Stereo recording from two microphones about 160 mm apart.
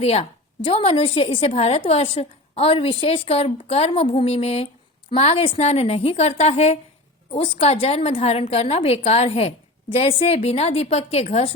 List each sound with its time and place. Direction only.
0.0 s a woman's voice: 40° left (ahead or behind)